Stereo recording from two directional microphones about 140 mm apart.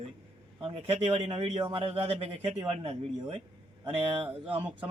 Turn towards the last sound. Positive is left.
turn(degrees=-35)  # may be behind; listen again after turning